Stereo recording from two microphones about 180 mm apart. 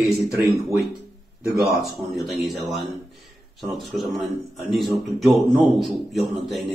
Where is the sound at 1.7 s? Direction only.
Centre (ahead or behind).